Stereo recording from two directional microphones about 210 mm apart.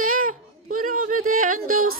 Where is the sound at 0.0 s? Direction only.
40° right (ahead or behind).